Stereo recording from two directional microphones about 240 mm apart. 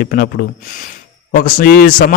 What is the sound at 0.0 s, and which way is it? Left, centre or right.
A man's voice, left.